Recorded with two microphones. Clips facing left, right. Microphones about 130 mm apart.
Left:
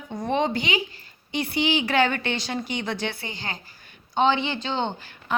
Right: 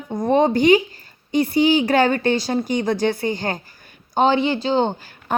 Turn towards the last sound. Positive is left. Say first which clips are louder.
# right 4 dB
turn(degrees=-40)  # may be behind; listen again after turning